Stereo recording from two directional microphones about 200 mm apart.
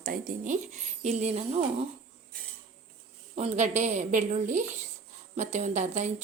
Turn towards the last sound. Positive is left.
turn(degrees=-35)  # may be behind; listen again after turning